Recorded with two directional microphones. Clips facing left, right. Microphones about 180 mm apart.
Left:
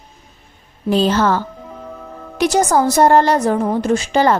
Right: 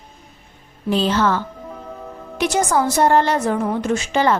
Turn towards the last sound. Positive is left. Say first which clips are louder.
# left 3 dB
turn(degrees=40)  # may be behind; listen again after turning